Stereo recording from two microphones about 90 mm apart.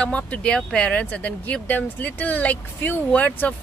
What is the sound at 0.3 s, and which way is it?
Speech, 10° left (ahead or behind).